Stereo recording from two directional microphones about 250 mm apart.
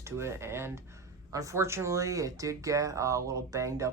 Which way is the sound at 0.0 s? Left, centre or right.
Centre.